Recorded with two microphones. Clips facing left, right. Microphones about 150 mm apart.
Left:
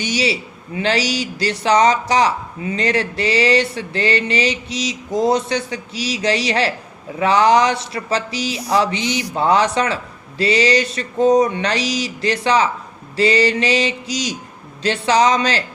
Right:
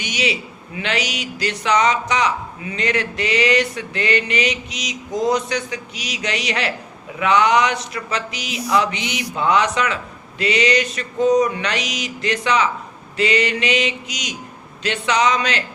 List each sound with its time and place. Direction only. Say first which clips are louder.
0.0 s speech: left 3 dB; 30° left (ahead or behind)